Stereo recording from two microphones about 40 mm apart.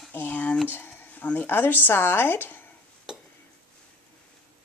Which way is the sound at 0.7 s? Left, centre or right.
Left.